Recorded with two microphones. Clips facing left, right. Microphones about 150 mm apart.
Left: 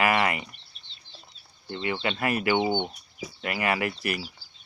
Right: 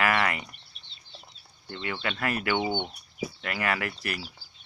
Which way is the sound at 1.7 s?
20° left (ahead or behind).